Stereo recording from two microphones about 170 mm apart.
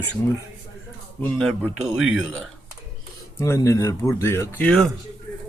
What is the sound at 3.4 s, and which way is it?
Speech, 15° left (ahead or behind).